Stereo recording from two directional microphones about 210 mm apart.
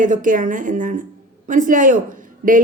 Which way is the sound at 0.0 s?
40° right (ahead or behind).